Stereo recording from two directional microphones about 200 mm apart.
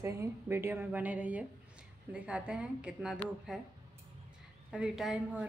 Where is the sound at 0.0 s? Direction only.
15° right (ahead or behind).